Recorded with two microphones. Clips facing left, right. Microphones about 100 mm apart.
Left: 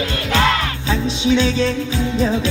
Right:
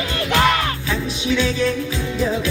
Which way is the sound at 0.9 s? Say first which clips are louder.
Left 8 dB; 20° left (ahead or behind).